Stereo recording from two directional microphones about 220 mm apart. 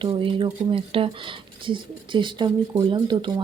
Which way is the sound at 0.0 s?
25° right (ahead or behind).